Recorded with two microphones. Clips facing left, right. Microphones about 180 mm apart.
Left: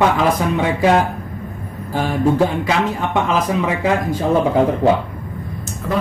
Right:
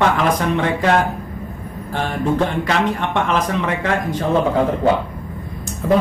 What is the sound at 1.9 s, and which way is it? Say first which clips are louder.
A man's voice: left 3 dB; 5° left (ahead or behind).